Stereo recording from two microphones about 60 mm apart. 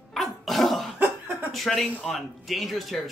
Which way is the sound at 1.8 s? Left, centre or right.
Left.